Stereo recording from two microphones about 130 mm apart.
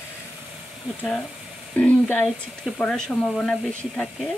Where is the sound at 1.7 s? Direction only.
10° left (ahead or behind).